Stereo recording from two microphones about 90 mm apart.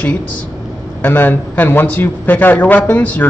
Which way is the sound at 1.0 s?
20° left (ahead or behind).